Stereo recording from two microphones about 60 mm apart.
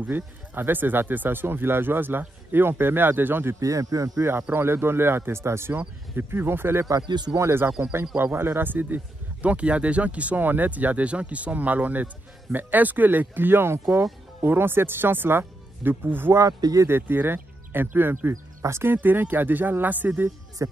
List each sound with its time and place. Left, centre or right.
0.0 s speech: right
3.5 s speech: right
4.2 s speech: right
16.3 s speech: right
16.8 s speech: right
18.3 s speech: right
18.9 s speech: right